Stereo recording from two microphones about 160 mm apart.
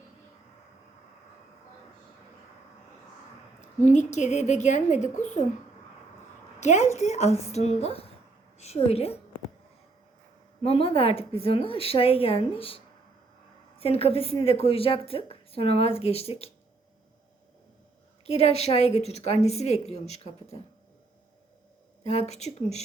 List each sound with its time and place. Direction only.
3.8 s a woman's voice: 50° left (ahead or behind)
6.6 s a woman's voice: 45° left (ahead or behind)
10.6 s a woman's voice: 40° left (ahead or behind)
18.3 s a woman's voice: 40° left (ahead or behind)
22.1 s a woman's voice: 40° left (ahead or behind)